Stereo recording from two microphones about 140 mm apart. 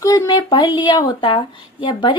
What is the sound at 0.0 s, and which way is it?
A woman's voice, 25° left (ahead or behind).